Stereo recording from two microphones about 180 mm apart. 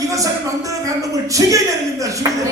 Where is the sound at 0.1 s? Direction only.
20° right (ahead or behind).